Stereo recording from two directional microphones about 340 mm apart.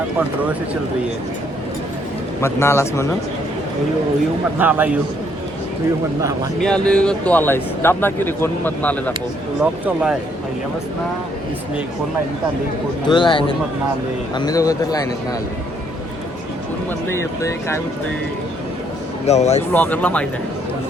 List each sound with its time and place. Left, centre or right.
2.4 s a man's voice: centre
4.5 s speech: centre
6.6 s speech: centre
13.1 s a man's voice: centre
17.1 s a man's voice: centre
19.2 s speech: centre
19.7 s speech: centre